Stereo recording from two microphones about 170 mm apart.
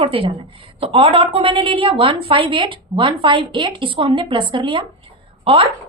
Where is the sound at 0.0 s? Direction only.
30° right (ahead or behind).